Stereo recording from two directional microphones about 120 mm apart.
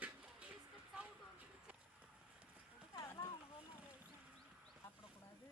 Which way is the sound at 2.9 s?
30° left (ahead or behind).